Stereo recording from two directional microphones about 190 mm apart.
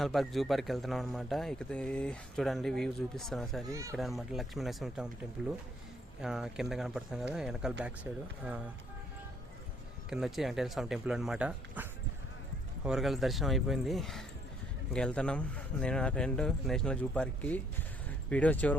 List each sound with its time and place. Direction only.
0.0 s a man's voice: centre (ahead or behind)
3.7 s speech: 15° right (ahead or behind)
3.9 s a man's voice: centre (ahead or behind)
10.1 s a man's voice: centre (ahead or behind)